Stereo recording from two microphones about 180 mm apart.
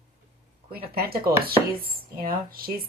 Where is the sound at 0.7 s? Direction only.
60° right (ahead or behind).